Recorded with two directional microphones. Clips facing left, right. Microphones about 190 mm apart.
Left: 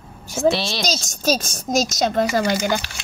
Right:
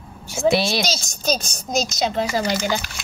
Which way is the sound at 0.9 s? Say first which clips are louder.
Left 2 dB; 45° left (ahead or behind).